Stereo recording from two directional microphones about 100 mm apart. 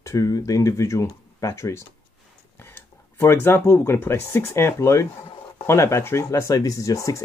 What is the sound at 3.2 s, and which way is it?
Speech, 25° left (ahead or behind).